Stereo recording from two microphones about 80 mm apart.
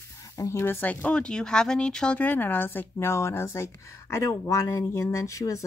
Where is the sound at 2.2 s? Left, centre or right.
Left.